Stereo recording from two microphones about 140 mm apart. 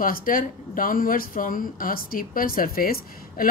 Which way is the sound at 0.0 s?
90° left.